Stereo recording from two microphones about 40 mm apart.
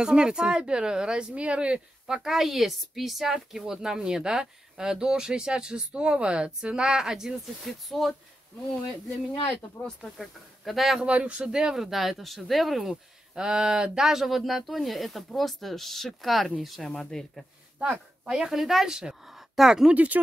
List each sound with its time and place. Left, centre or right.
0.0 s speech: right
1.3 s speech: right
2.0 s speech: centre
7.6 s speech: centre
10.1 s speech: centre
11.2 s speech: right; by 12.9 s centre
13.3 s speech: centre
17.0 s speech: centre
17.8 s speech: centre
18.9 s speech: centre
19.9 s speech: right